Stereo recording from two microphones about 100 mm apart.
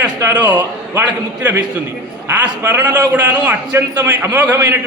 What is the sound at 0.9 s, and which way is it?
Speech, 20° right (ahead or behind).